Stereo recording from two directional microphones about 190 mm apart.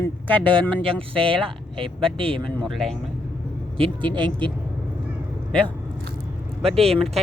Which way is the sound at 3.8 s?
25° right (ahead or behind).